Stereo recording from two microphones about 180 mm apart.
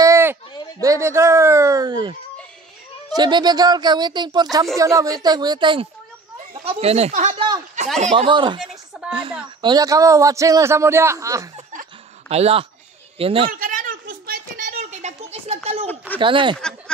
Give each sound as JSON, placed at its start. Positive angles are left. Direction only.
{"t": 0.0, "sound": "speech", "side_deg": -15}
{"t": 7.3, "sound": "speech", "side_deg": -25}
{"t": 8.0, "sound": "speech", "side_deg": -40}
{"t": 8.3, "sound": "speech", "side_deg": -25}
{"t": 8.9, "sound": "a sound", "side_deg": -5}
{"t": 9.6, "sound": "a man's voice", "side_deg": -20}
{"t": 11.5, "sound": "snicker", "side_deg": -40}
{"t": 13.2, "sound": "speech", "side_deg": -30}
{"t": 13.5, "sound": "a sound", "side_deg": -50}
{"t": 14.7, "sound": "a sound", "side_deg": -40}
{"t": 16.2, "sound": "speech", "side_deg": -25}
{"t": 16.5, "sound": "a sound", "side_deg": 5}